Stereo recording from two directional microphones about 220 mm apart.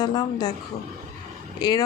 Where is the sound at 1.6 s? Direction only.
20° left (ahead or behind).